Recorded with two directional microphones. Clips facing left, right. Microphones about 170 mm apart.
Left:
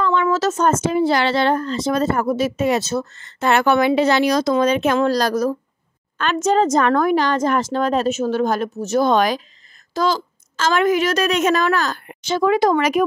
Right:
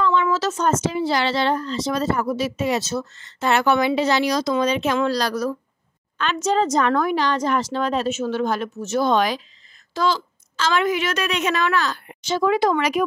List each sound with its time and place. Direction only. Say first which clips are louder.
0.0 s speech: left 2 dB; 50° left (ahead or behind)
12.1 s speech: left 3 dB; 55° left (ahead or behind)